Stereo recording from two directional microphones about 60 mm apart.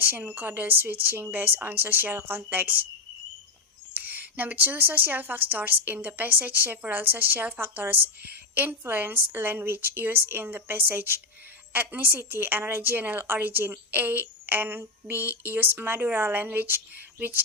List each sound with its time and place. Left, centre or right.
0.0 s a woman's voice: right
3.9 s a woman's voice: right